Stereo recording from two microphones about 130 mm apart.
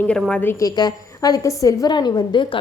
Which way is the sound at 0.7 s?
30° left (ahead or behind).